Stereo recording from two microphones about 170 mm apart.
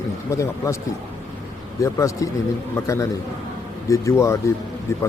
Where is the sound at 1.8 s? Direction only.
20° left (ahead or behind).